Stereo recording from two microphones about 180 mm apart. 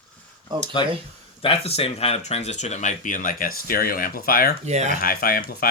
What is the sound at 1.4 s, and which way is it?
Speech, 35° left (ahead or behind).